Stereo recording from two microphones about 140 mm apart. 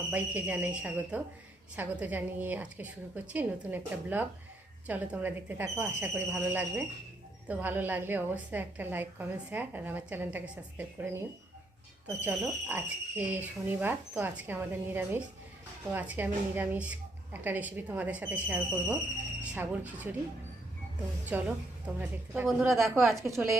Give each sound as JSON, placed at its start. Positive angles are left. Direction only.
{"t": 0.1, "sound": "a woman's voice", "side_deg": -10}
{"t": 12.2, "sound": "a woman's voice", "side_deg": -15}
{"t": 21.2, "sound": "a woman's voice", "side_deg": -10}
{"t": 22.7, "sound": "a woman's voice", "side_deg": 0}
{"t": 23.2, "sound": "a woman's voice", "side_deg": -20}